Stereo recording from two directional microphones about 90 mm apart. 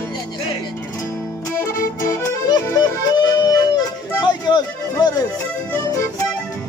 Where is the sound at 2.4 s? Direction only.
50° left (ahead or behind).